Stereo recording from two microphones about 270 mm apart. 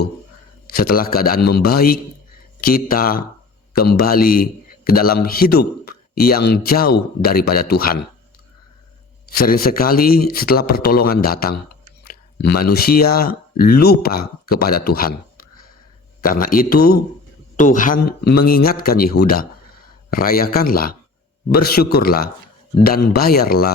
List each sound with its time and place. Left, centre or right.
0.7 s a man's voice: left
9.3 s a man's voice: left